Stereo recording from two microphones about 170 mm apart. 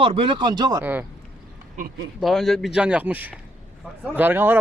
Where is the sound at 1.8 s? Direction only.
45° right (ahead or behind).